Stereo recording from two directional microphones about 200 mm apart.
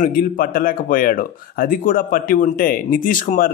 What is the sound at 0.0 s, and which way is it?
Speech, 45° left (ahead or behind).